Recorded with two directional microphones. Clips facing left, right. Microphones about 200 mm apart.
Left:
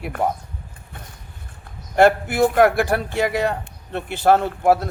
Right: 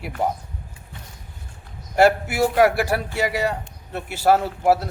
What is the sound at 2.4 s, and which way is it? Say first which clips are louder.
Speech: left 2 dB; 50° left (ahead or behind).